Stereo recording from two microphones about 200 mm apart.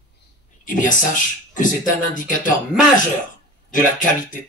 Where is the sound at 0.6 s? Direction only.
40° left (ahead or behind).